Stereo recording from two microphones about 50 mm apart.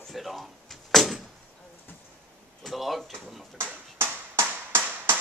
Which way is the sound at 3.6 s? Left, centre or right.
Right.